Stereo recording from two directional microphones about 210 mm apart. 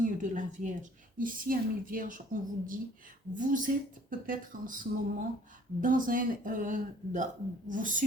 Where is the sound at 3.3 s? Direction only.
40° right (ahead or behind).